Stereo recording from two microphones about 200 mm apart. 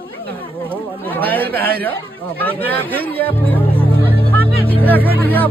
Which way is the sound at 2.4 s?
10° left (ahead or behind).